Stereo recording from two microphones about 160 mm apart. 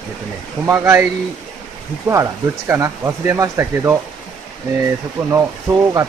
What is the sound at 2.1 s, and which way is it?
Speech, 15° right (ahead or behind).